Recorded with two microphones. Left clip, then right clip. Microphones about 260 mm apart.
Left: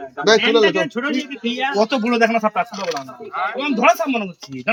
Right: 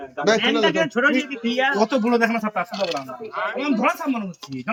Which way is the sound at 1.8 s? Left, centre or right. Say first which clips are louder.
Left 3 dB; left.